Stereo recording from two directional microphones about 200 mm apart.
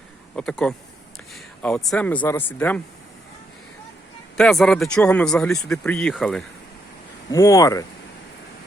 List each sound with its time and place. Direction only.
0.3 s speech: 5° left (ahead or behind)
4.4 s speech: centre (ahead or behind)
7.3 s speech: 15° left (ahead or behind)